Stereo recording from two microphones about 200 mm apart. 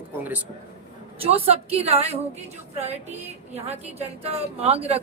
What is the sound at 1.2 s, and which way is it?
A woman's voice, 30° right (ahead or behind).